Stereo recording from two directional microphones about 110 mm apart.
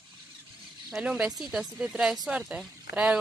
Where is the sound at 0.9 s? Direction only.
5° right (ahead or behind).